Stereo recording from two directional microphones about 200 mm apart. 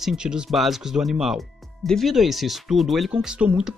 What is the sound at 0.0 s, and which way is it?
Speech, 5° right (ahead or behind).